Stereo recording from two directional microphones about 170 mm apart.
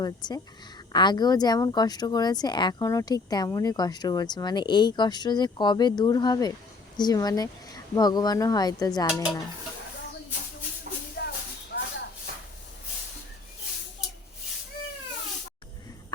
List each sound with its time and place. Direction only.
0.0 s speech: 25° left (ahead or behind)
11.2 s a sound: 75° left (ahead or behind)
11.7 s shuffle: 80° left